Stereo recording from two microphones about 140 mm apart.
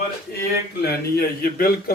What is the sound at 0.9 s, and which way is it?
A man's voice, 90° left.